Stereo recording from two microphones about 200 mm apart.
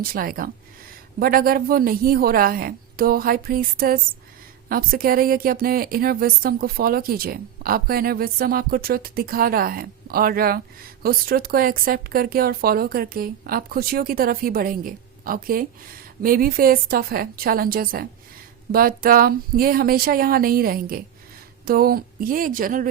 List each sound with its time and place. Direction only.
0.0 s speech: 45° right (ahead or behind)